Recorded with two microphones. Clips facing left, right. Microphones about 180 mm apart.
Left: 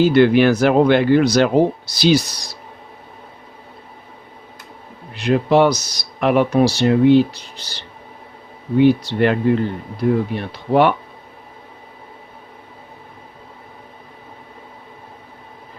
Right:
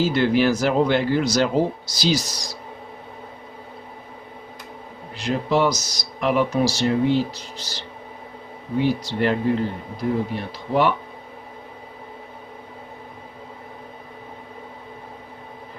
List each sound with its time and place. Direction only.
0.0 s speech: 65° left (ahead or behind)
5.1 s speech: 60° left (ahead or behind)